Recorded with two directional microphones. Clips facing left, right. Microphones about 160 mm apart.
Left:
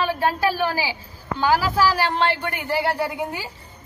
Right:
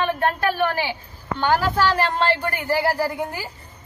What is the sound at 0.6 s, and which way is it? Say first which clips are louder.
A woman's voice: right 1 dB; 5° left (ahead or behind).